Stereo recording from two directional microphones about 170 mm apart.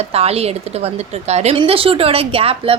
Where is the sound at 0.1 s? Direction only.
35° right (ahead or behind).